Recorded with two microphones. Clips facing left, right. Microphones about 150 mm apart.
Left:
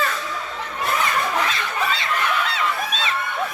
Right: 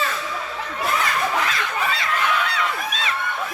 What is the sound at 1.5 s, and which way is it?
Chicken, 25° left (ahead or behind).